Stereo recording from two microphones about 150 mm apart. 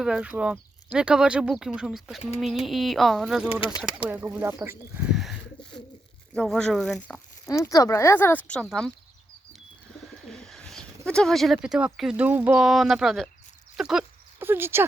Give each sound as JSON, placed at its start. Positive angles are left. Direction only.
{"t": 0.0, "sound": "speech", "side_deg": -5}
{"t": 5.1, "sound": "bird", "side_deg": 0}
{"t": 6.3, "sound": "speech", "side_deg": 5}
{"t": 7.4, "sound": "speech", "side_deg": 20}
{"t": 10.2, "sound": "speech", "side_deg": 5}
{"t": 13.7, "sound": "a sound", "side_deg": -5}
{"t": 14.3, "sound": "speech", "side_deg": -15}